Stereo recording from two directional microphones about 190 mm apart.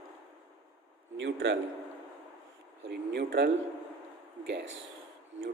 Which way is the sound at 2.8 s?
65° right (ahead or behind).